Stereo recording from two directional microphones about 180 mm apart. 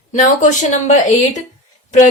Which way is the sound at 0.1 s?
45° left (ahead or behind).